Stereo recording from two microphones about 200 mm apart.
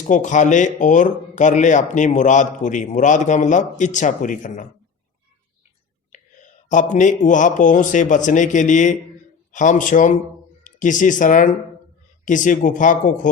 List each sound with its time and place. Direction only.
0.1 s speech: 40° left (ahead or behind)
6.7 s speech: 40° left (ahead or behind)